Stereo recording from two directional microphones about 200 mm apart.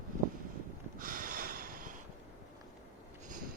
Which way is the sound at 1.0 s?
45° right (ahead or behind).